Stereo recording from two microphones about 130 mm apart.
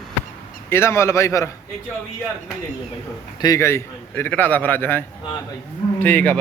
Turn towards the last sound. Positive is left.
turn(degrees=10)  # may be behind; listen again after turning